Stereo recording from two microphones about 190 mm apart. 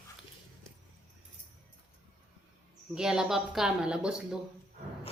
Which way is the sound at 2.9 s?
5° right (ahead or behind).